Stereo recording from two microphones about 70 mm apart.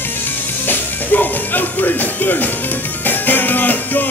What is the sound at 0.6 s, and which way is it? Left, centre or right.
Music, left.